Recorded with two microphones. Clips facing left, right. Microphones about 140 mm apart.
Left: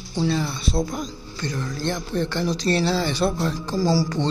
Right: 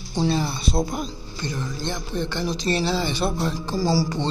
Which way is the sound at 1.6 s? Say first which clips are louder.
Left 3 dB; 20° right (ahead or behind).